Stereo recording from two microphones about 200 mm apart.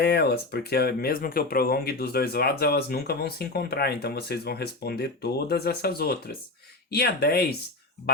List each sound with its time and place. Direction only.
0.0 s speech: 55° left (ahead or behind)